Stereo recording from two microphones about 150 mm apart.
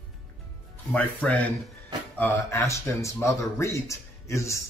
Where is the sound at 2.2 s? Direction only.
20° left (ahead or behind).